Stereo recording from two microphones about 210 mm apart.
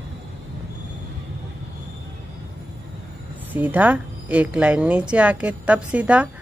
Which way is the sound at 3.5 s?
5° right (ahead or behind).